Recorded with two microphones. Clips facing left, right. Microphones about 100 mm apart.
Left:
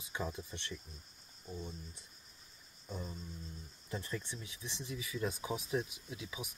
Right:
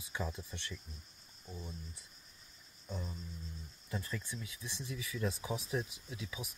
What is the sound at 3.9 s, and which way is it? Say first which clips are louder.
Speech: even; 20° left (ahead or behind).